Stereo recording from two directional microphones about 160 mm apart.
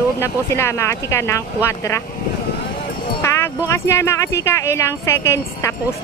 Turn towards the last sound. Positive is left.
turn(degrees=15)  # may be behind; listen again after turning